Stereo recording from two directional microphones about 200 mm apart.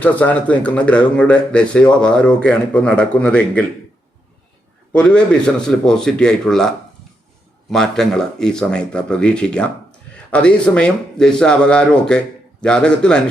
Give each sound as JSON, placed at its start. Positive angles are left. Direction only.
{"t": 0.0, "sound": "a man's voice", "side_deg": 10}
{"t": 4.9, "sound": "a man's voice", "side_deg": 5}